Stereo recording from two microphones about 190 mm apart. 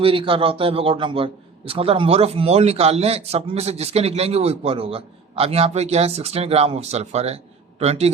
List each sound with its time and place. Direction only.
0.0 s a man's voice: 30° right (ahead or behind)